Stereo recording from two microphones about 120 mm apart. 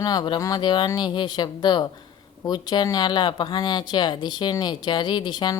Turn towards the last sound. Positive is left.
turn(degrees=35)  # may be behind; listen again after turning